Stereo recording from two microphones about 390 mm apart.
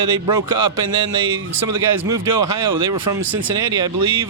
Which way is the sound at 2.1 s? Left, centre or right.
Centre.